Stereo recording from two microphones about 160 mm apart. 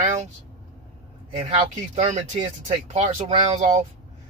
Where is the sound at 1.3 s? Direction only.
40° right (ahead or behind).